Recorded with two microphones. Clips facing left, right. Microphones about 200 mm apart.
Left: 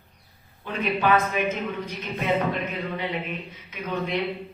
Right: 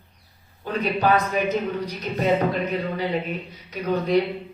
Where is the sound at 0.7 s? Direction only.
40° right (ahead or behind).